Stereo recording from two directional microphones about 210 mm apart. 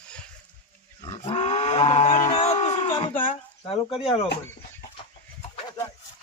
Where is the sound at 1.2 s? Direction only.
30° left (ahead or behind).